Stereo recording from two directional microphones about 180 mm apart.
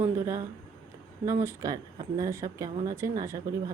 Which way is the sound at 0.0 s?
15° right (ahead or behind).